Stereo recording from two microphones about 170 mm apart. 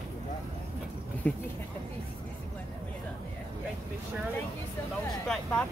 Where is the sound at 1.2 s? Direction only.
10° left (ahead or behind).